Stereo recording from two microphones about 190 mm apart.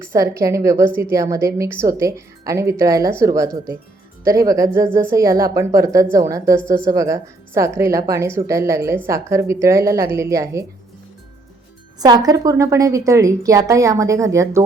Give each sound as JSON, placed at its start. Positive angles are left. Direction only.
{"t": 0.1, "sound": "a woman's voice", "side_deg": -15}
{"t": 11.9, "sound": "a woman's voice", "side_deg": -20}